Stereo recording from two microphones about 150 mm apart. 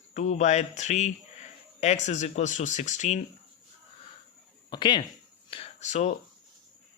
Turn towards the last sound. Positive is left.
turn(degrees=50)  # may be behind; listen again after turning